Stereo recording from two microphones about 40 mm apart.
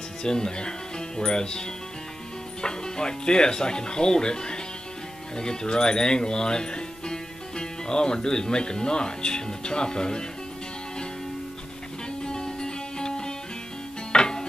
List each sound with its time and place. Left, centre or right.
0.2 s speech: centre
12.3 s music: centre